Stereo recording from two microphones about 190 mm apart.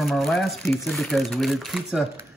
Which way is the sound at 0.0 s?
Centre (ahead or behind).